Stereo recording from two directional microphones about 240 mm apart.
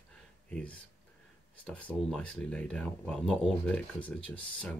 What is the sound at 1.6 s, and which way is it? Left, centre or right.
Speech, centre.